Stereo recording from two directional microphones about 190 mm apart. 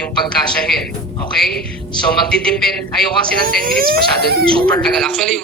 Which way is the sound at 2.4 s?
Centre (ahead or behind).